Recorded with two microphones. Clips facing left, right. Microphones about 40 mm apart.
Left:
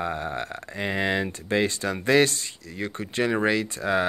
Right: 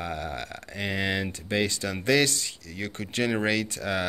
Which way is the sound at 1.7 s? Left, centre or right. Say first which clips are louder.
Left 3 dB; left.